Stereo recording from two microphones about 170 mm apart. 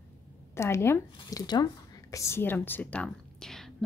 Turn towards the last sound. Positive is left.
turn(degrees=0)  # may be behind; listen again after turning